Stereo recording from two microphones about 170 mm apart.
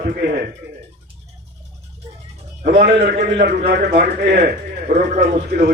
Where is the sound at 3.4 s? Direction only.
75° right (ahead or behind).